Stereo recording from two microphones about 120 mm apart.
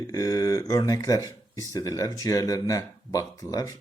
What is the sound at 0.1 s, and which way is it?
Speech, 30° left (ahead or behind).